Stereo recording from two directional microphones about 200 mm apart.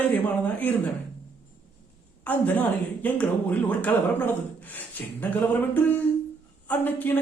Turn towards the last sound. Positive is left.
turn(degrees=10)  # may be behind; listen again after turning